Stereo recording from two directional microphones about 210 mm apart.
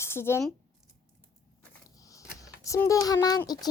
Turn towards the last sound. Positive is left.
turn(degrees=20)  # may be behind; listen again after turning